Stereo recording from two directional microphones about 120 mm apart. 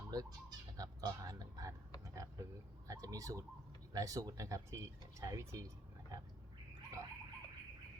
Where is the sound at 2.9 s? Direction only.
30° right (ahead or behind).